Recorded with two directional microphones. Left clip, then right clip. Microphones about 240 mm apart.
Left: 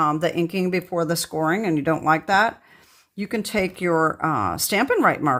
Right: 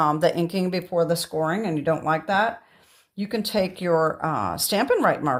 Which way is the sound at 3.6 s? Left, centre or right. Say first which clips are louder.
Left 2 dB; left.